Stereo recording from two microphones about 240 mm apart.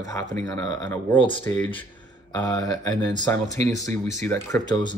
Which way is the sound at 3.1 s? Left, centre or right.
Centre.